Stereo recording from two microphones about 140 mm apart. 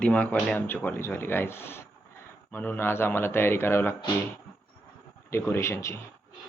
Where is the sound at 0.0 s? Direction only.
10° left (ahead or behind).